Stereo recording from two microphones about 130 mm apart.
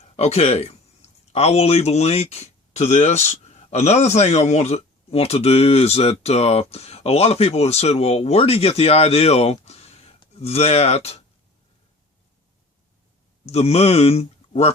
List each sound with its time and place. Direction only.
0.2 s speech: 55° left (ahead or behind)
13.4 s speech: 55° left (ahead or behind)